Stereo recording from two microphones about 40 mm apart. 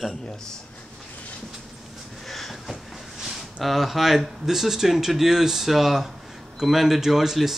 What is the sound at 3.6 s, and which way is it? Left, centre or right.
Speech, centre.